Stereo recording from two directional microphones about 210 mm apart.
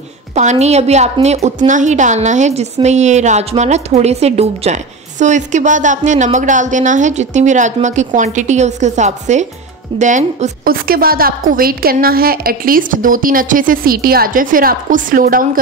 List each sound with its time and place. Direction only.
0.3 s a woman's voice: 35° right (ahead or behind)